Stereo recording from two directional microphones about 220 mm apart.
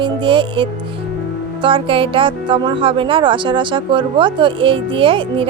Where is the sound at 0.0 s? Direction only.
20° right (ahead or behind).